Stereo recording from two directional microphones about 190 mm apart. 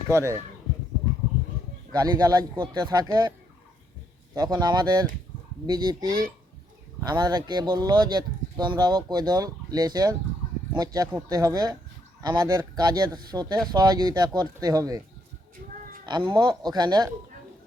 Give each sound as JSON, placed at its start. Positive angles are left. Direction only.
{"t": 0.1, "sound": "speech", "side_deg": -15}
{"t": 1.9, "sound": "speech", "side_deg": -20}
{"t": 4.4, "sound": "speech", "side_deg": -20}
{"t": 16.0, "sound": "speech", "side_deg": -25}